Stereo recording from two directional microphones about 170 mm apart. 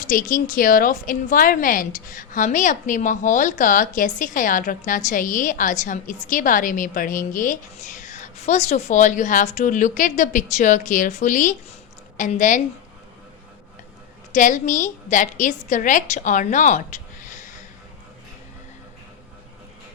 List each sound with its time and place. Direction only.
0.0 s a woman's voice: 50° left (ahead or behind)
14.3 s a woman's voice: 50° left (ahead or behind)